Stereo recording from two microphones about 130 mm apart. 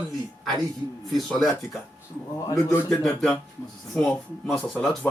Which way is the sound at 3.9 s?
5° left (ahead or behind).